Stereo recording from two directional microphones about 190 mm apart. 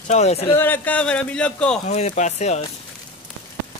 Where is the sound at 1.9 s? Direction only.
35° left (ahead or behind).